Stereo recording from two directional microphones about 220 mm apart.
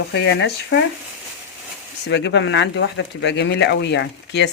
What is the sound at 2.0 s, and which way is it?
Speech, 55° left (ahead or behind).